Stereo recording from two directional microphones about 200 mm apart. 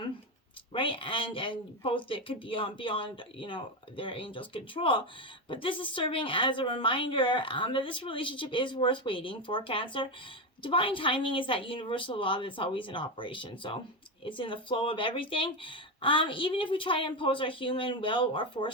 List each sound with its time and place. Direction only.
0.7 s a woman's voice: 25° left (ahead or behind)